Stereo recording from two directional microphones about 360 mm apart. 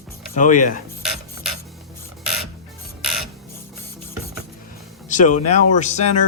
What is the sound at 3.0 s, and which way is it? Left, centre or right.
Music, centre.